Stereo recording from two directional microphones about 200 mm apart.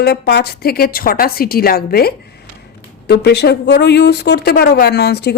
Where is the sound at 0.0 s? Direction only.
55° left (ahead or behind).